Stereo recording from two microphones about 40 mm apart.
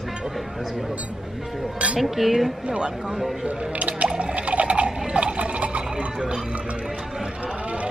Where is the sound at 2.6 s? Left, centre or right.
Right.